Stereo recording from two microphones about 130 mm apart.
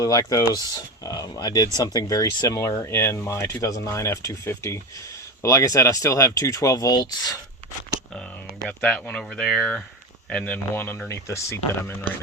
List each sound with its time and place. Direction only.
0.0 s speech: 25° left (ahead or behind)
8.6 s speech: 5° left (ahead or behind)